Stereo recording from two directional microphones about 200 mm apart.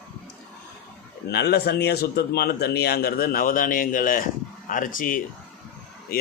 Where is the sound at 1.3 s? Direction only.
55° left (ahead or behind).